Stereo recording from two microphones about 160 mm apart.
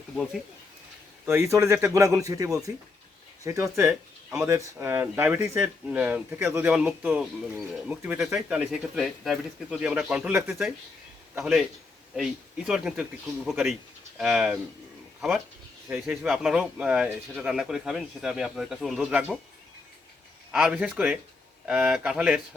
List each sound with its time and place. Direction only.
1.2 s speech: 15° right (ahead or behind)
15.9 s speech: 5° right (ahead or behind)
20.5 s speech: 5° right (ahead or behind)